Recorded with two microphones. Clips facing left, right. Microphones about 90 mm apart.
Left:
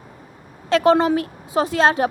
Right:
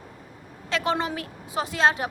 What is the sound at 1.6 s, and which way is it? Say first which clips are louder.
Speech: left 6 dB; 40° left (ahead or behind).